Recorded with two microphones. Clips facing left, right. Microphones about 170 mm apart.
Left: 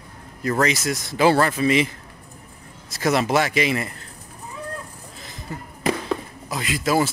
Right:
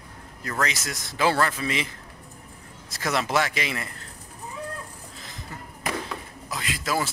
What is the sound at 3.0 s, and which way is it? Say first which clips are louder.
Speech: left 5 dB; 15° left (ahead or behind).